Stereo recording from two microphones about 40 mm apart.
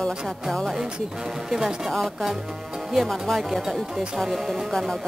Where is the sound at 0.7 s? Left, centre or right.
Centre.